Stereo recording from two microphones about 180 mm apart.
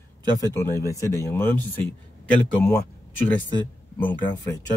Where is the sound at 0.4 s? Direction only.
20° left (ahead or behind).